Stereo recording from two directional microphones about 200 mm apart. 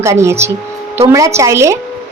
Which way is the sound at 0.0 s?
15° right (ahead or behind).